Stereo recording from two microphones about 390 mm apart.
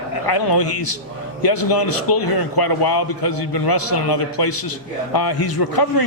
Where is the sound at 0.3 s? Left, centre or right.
Left.